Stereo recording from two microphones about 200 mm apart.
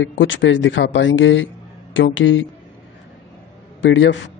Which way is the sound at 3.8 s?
65° left (ahead or behind).